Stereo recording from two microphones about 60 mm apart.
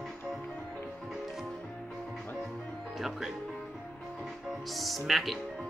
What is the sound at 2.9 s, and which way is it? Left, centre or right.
Speech, centre.